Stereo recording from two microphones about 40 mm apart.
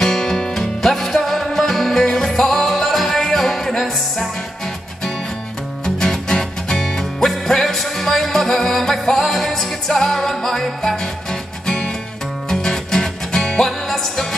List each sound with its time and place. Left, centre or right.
0.0 s music: centre
5.9 s music: centre